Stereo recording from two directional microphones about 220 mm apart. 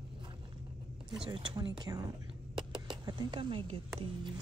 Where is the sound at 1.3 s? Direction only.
20° right (ahead or behind).